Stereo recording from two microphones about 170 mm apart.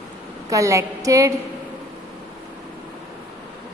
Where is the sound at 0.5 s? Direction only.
15° right (ahead or behind).